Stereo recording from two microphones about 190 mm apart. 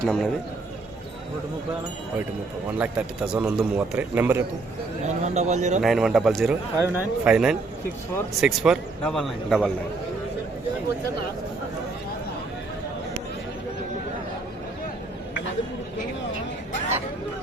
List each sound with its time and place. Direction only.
0.0 s a man's voice: 5° left (ahead or behind)
2.7 s a man's voice: 5° right (ahead or behind)
5.0 s speech: 35° right (ahead or behind)
5.8 s a man's voice: centre (ahead or behind)